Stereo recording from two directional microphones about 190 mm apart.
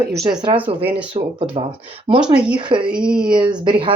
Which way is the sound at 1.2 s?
35° right (ahead or behind).